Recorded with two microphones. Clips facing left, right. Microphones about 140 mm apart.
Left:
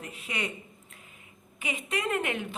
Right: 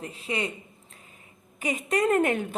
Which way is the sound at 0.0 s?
30° right (ahead or behind).